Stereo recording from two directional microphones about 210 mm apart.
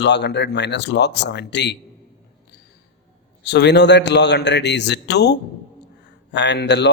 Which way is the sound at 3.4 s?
55° left (ahead or behind).